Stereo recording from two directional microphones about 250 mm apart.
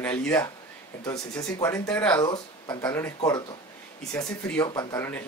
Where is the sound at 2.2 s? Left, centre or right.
Centre.